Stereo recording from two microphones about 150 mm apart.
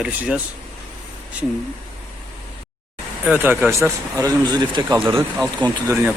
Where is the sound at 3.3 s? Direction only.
10° right (ahead or behind); by 5.0 s 30° right (ahead or behind).